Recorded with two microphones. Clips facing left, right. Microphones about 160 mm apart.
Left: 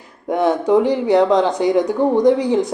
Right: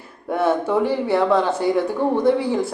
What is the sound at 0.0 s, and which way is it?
Speech, 15° left (ahead or behind).